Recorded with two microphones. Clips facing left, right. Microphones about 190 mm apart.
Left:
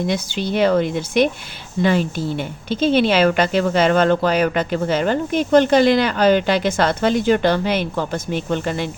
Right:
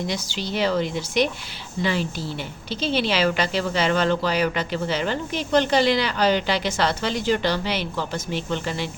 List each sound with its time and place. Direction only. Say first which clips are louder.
0.1 s a woman's voice: left 6 dB; 55° left (ahead or behind)